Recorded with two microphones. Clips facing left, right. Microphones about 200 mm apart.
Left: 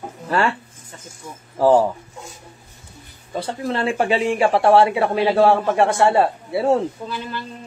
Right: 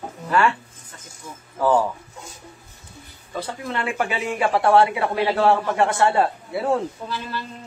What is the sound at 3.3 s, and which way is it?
Speech, 30° left (ahead or behind).